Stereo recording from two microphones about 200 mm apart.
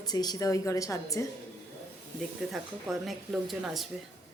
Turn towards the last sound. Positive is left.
turn(degrees=0)  # may be behind; listen again after turning